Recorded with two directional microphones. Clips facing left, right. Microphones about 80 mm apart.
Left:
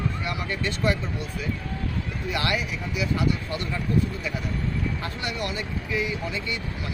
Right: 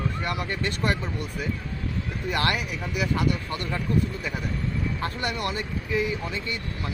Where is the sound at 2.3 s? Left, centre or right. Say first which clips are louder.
Right 1 dB; right.